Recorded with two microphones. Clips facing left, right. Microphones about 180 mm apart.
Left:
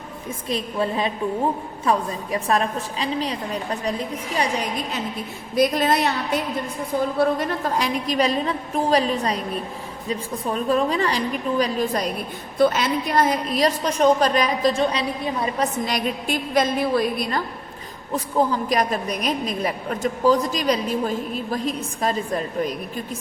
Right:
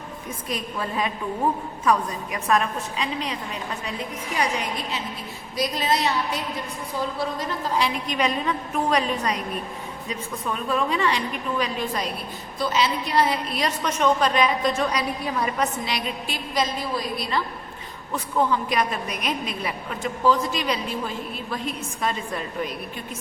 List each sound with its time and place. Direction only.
0.4 s a woman's voice: 30° left (ahead or behind)
5.5 s a woman's voice: 55° left (ahead or behind)
7.9 s a woman's voice: 35° left (ahead or behind)
15.8 s a woman's voice: 45° left (ahead or behind)
18.1 s a woman's voice: 35° left (ahead or behind)